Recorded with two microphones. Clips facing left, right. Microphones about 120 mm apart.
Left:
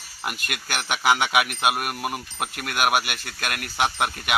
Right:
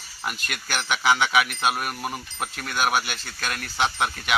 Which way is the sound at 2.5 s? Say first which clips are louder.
Left 1 dB; 60° left (ahead or behind).